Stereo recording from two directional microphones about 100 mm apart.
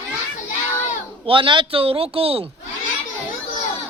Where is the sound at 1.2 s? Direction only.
60° right (ahead or behind).